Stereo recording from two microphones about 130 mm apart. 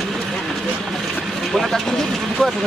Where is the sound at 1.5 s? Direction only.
Centre (ahead or behind).